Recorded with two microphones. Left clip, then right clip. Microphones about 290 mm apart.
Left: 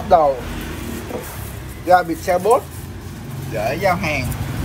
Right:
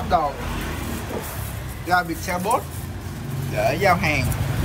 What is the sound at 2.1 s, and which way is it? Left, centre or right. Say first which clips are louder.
Speech: left 8 dB; right.